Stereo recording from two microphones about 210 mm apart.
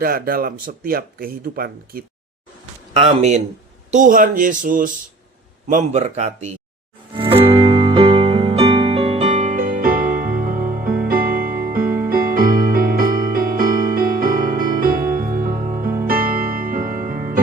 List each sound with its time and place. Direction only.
0.0 s speech: 45° right (ahead or behind)
3.1 s speech: 35° right (ahead or behind)
7.2 s music: 25° right (ahead or behind); by 17.4 s 40° right (ahead or behind)